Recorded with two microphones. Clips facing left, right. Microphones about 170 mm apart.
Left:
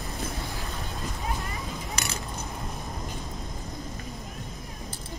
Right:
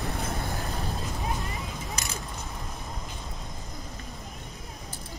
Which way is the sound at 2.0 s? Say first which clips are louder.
Left 3 dB; 70° left (ahead or behind).